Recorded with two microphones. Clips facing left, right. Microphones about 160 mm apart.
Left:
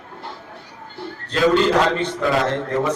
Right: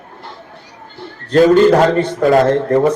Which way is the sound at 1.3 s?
45° right (ahead or behind).